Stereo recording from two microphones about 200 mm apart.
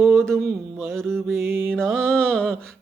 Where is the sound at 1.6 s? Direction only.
5° left (ahead or behind).